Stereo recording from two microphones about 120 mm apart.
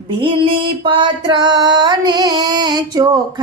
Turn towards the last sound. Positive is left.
turn(degrees=-35)  # may be behind; listen again after turning